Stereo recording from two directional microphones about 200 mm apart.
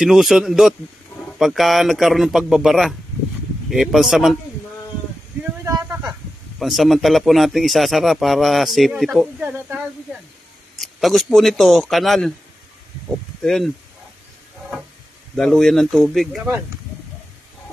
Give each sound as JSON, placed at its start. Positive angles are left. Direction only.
{"t": 0.0, "sound": "speech", "side_deg": 0}
{"t": 5.7, "sound": "a sound", "side_deg": -15}
{"t": 6.6, "sound": "speech", "side_deg": 0}
{"t": 10.8, "sound": "speech", "side_deg": 0}
{"t": 13.4, "sound": "speech", "side_deg": 0}
{"t": 15.3, "sound": "speech", "side_deg": 0}